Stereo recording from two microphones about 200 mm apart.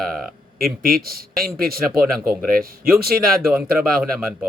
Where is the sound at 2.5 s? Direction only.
45° right (ahead or behind).